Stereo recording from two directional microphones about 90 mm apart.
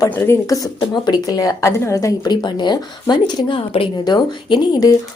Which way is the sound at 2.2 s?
55° left (ahead or behind).